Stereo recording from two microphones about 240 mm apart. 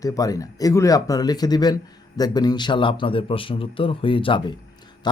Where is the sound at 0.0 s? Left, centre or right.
Centre.